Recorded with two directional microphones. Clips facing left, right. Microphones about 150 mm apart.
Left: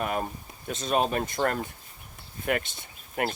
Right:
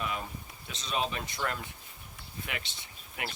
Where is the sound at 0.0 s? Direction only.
50° left (ahead or behind).